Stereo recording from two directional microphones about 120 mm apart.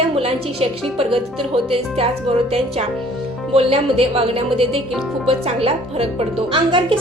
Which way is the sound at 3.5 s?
55° right (ahead or behind).